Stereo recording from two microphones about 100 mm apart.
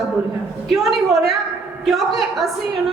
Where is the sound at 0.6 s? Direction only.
Centre (ahead or behind).